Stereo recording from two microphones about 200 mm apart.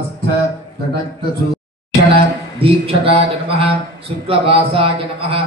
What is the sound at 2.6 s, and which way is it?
Speech, 25° right (ahead or behind).